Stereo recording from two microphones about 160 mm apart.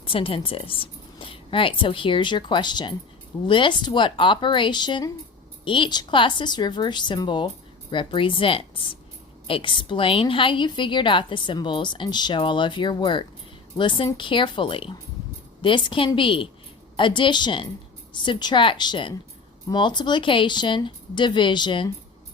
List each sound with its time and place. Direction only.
0.0 s a woman's voice: 35° left (ahead or behind)